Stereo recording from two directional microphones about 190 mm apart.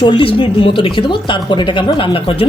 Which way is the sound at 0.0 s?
25° left (ahead or behind).